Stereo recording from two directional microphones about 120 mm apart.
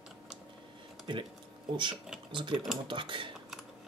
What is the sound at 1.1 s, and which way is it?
Speech, 40° right (ahead or behind).